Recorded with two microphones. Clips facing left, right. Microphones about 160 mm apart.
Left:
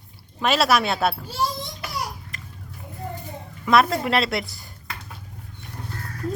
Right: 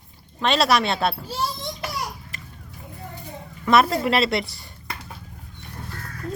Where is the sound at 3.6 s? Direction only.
Centre (ahead or behind).